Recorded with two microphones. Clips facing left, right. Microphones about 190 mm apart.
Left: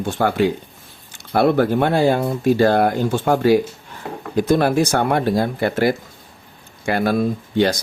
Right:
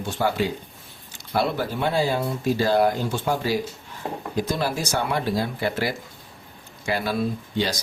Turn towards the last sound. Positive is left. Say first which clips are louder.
# left 8 dB
turn(degrees=50)  # may be behind; listen again after turning